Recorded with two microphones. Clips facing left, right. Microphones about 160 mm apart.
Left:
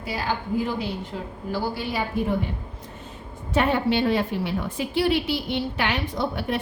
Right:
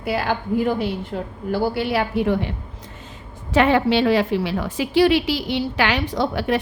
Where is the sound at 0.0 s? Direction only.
60° right (ahead or behind).